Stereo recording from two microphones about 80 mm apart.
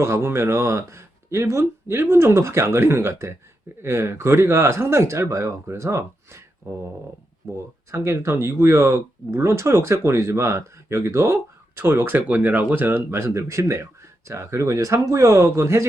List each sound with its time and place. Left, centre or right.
0.0 s speech: right